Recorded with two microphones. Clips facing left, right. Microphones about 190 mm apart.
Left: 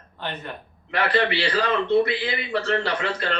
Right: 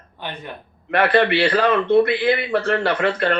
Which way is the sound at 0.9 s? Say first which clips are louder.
Right 6 dB; 55° right (ahead or behind).